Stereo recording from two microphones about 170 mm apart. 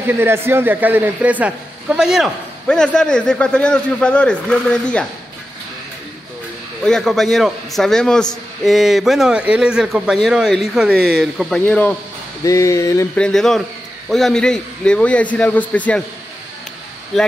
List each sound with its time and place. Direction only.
0.0 s a man's voice: 15° right (ahead or behind); by 5.0 s 5° left (ahead or behind)
6.8 s a man's voice: 5° left (ahead or behind)
11.6 s a sound: 10° left (ahead or behind)
13.1 s a man's voice: 5° left (ahead or behind)
17.1 s a man's voice: centre (ahead or behind)